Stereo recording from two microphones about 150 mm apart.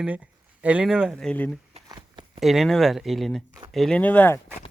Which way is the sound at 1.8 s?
25° right (ahead or behind).